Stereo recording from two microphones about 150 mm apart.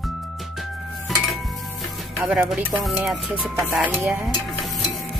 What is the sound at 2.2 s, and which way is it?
Music, centre (ahead or behind).